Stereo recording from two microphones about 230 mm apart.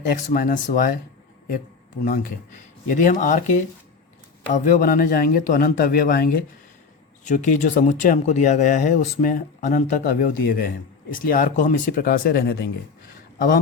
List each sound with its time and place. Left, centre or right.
0.1 s speech: left
2.0 s speech: left